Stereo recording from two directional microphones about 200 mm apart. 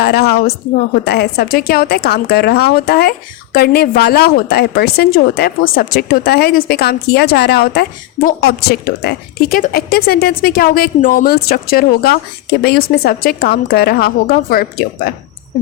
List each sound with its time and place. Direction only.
0.0 s a woman's voice: 50° left (ahead or behind)